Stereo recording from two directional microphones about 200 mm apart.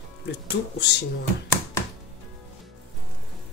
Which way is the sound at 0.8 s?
55° left (ahead or behind).